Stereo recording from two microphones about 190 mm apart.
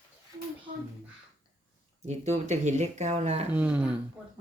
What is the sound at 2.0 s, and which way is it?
Speech, 35° right (ahead or behind).